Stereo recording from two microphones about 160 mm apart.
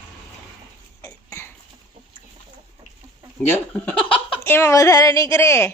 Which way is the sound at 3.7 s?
10° left (ahead or behind).